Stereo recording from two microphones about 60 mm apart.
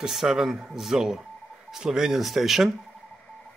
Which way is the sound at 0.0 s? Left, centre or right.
Centre.